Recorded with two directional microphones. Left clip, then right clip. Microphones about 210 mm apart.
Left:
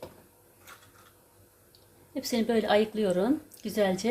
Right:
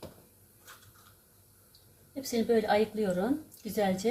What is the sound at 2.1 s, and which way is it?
A woman's voice, 45° left (ahead or behind).